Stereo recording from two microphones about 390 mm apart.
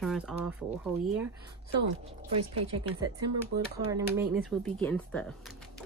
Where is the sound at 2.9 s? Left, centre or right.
Right.